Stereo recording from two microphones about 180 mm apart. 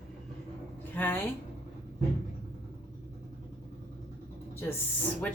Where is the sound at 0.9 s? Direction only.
10° left (ahead or behind).